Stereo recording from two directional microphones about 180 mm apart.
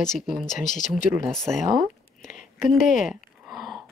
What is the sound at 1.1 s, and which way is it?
Speech, centre (ahead or behind).